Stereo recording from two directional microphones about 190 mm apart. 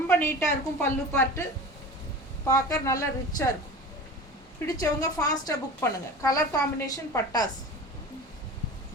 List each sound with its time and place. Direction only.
0.2 s a woman's voice: 10° left (ahead or behind)
4.6 s a woman's voice: 20° left (ahead or behind)